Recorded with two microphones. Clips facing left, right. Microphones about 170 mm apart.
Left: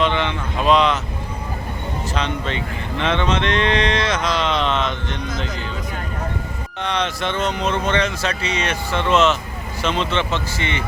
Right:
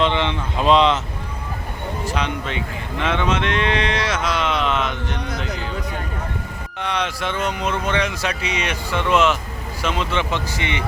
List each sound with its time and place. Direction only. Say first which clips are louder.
0.0 s speech: even; 25° right (ahead or behind)
2.1 s speech: left 2 dB; 10° right (ahead or behind)
6.8 s speech: left 1 dB; 10° right (ahead or behind)